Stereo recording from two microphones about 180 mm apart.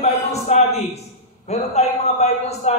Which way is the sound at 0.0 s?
40° left (ahead or behind).